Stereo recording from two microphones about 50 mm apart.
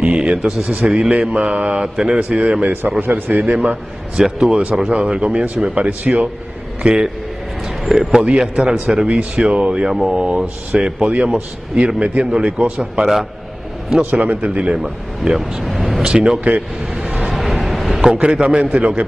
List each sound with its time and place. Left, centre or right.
0.0 s a sound: right
0.7 s speech: right
2.6 s a man's voice: right
4.2 s a man's voice: centre
7.8 s speech: centre
8.1 s a man's voice: centre
12.7 s a man's voice: centre
13.8 s speech: centre
15.6 s speech: centre
16.2 s speech: right
17.3 s a sound: centre
18.2 s speech: right